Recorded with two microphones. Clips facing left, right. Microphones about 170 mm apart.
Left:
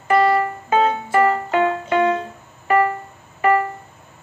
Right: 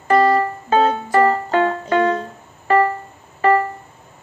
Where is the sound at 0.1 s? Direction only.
35° right (ahead or behind).